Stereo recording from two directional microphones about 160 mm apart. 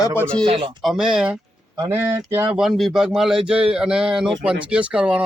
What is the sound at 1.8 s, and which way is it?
Speech, 15° right (ahead or behind).